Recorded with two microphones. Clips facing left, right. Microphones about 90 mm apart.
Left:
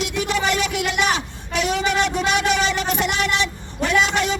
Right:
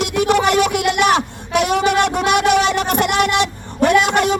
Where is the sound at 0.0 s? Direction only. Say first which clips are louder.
Right 7 dB; 60° right (ahead or behind).